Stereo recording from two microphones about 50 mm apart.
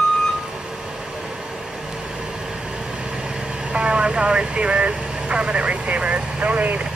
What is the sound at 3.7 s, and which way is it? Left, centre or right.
Vehicle, centre.